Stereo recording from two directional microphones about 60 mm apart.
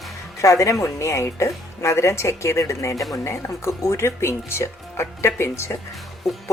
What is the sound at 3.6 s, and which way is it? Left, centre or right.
Speech, left.